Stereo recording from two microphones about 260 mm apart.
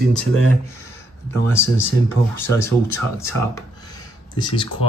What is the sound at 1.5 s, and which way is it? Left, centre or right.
Speech, centre.